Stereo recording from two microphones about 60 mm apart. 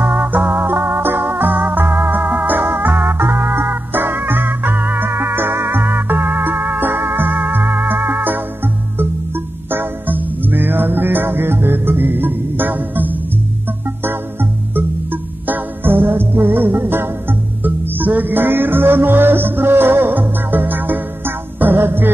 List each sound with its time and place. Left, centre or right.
0.0 s music: right
9.7 s music: right